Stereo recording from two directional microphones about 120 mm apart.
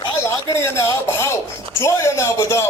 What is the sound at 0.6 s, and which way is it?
A man's voice, 25° left (ahead or behind).